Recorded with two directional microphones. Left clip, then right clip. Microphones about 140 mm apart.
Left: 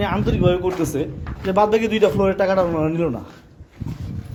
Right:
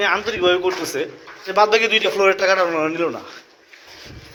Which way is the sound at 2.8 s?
40° left (ahead or behind).